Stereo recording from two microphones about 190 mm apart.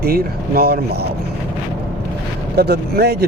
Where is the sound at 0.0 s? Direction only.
55° right (ahead or behind).